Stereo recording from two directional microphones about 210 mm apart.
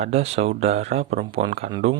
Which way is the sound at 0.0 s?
30° right (ahead or behind).